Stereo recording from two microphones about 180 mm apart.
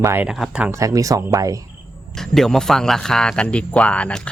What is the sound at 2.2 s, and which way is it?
Speech, centre (ahead or behind).